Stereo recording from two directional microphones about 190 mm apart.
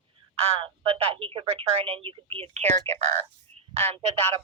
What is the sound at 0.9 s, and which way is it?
Speech, 30° right (ahead or behind).